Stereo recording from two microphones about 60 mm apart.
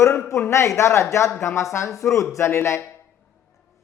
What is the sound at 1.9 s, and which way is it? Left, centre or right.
Speech, left.